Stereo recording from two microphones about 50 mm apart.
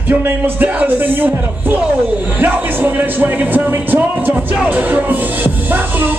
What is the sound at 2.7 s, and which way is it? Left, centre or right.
Speech, right.